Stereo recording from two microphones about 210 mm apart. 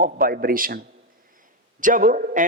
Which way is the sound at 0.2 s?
45° right (ahead or behind).